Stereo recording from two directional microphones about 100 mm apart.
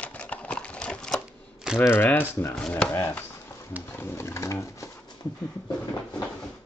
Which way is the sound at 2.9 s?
20° left (ahead or behind).